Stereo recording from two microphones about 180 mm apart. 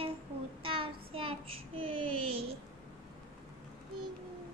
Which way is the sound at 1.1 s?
30° right (ahead or behind).